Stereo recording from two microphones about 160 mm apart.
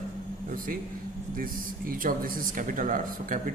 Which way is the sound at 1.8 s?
60° right (ahead or behind).